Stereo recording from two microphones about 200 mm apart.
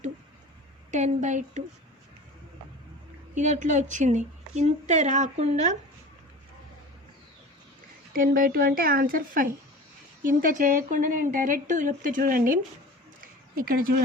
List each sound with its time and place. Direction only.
0.9 s a woman's voice: 35° right (ahead or behind)
3.3 s a woman's voice: 40° right (ahead or behind)
8.1 s a woman's voice: 45° right (ahead or behind)
13.6 s a woman's voice: 45° right (ahead or behind)